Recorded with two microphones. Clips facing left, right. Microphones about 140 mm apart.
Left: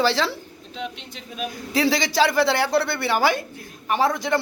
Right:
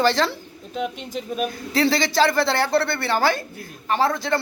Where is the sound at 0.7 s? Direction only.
50° right (ahead or behind).